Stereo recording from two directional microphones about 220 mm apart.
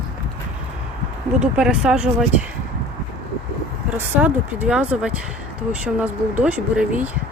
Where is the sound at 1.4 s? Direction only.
5° right (ahead or behind).